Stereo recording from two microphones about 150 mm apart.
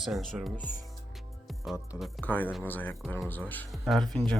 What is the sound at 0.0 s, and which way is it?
Speech, centre (ahead or behind).